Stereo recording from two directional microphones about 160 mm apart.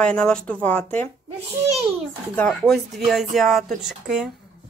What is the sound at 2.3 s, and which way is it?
Speech, 5° left (ahead or behind).